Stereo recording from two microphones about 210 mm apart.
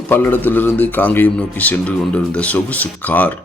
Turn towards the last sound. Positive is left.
turn(degrees=10)  # may be behind; listen again after turning